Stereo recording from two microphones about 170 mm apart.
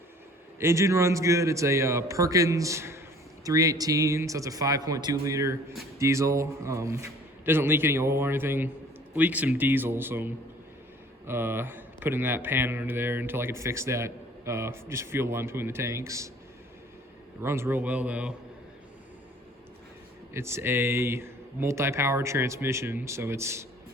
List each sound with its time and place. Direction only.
0.6 s speech: 15° right (ahead or behind)
17.4 s speech: 15° right (ahead or behind)
20.3 s speech: 15° right (ahead or behind)